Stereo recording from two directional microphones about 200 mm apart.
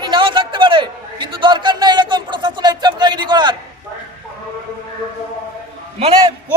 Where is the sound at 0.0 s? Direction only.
25° right (ahead or behind).